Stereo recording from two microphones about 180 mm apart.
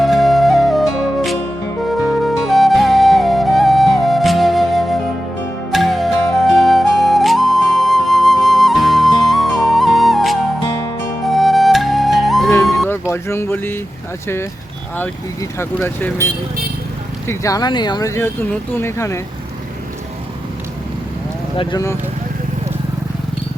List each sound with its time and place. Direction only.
0.0 s music: centre (ahead or behind)
12.9 s music: 15° left (ahead or behind)
14.9 s speech: 15° left (ahead or behind)
17.2 s speech: 20° left (ahead or behind)
21.6 s speech: 20° left (ahead or behind)